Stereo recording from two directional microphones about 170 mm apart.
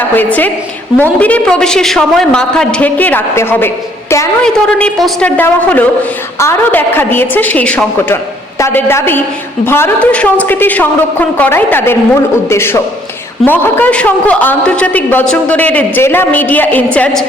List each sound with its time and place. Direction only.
0.1 s a woman's voice: 10° left (ahead or behind)